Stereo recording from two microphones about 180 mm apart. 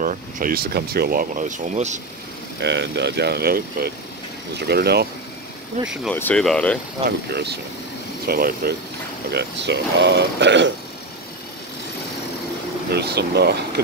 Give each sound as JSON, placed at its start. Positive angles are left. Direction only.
{"t": 0.0, "sound": "speech", "side_deg": -50}
{"t": 2.6, "sound": "speech", "side_deg": -75}
{"t": 6.1, "sound": "speech", "side_deg": 5}
{"t": 7.1, "sound": "speech", "side_deg": -65}
{"t": 8.3, "sound": "speech", "side_deg": -55}
{"t": 9.3, "sound": "speech", "side_deg": -70}
{"t": 12.9, "sound": "speech", "side_deg": -65}